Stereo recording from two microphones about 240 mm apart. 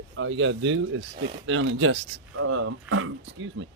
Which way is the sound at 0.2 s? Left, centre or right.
Right.